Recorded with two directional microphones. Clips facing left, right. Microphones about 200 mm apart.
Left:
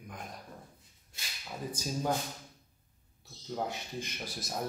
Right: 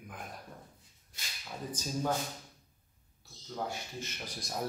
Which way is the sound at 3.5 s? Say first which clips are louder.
Left 2 dB; 20° left (ahead or behind).